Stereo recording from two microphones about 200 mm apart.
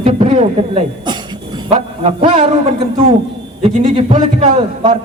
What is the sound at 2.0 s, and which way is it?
A man's voice, 30° right (ahead or behind).